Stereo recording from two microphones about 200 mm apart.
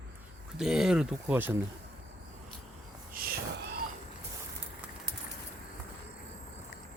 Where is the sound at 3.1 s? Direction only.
50° right (ahead or behind).